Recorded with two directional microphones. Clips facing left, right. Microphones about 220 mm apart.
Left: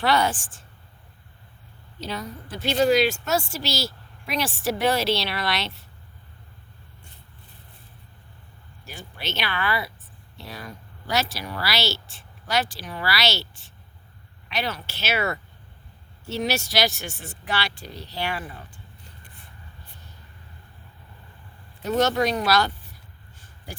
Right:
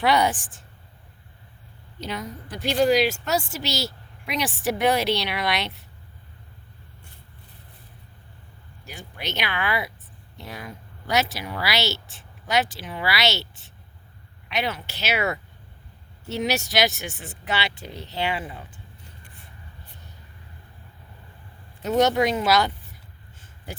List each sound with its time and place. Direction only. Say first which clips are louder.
0.0 s a woman's voice: right 1 dB; 20° right (ahead or behind)
2.0 s a woman's voice: even; 20° right (ahead or behind)
8.8 s a woman's voice: right 1 dB; 20° right (ahead or behind)
21.9 s speech: right 2 dB; 20° right (ahead or behind)